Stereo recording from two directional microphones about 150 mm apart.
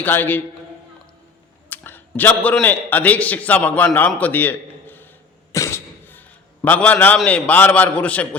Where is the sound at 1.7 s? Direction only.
10° left (ahead or behind).